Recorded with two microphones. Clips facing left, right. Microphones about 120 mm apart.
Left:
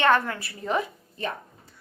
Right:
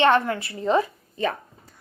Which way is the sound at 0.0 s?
25° right (ahead or behind).